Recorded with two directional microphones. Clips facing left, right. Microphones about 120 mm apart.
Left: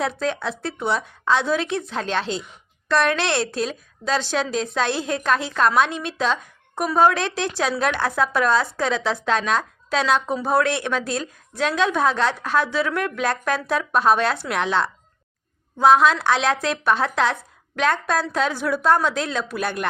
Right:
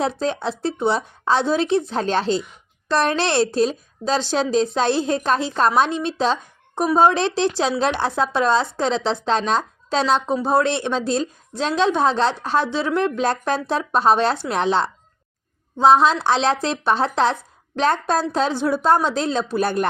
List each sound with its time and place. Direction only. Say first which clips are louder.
0.0 s a woman's voice: right 2 dB; 30° right (ahead or behind)